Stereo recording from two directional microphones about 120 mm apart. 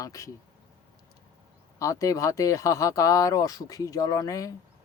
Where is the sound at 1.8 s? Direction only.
25° left (ahead or behind).